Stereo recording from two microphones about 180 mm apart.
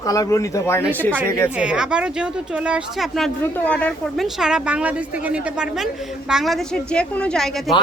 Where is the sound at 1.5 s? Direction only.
5° right (ahead or behind).